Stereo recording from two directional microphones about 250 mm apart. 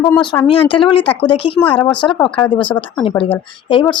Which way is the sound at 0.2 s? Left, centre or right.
Centre.